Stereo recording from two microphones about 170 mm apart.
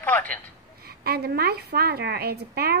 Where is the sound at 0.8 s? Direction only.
65° right (ahead or behind).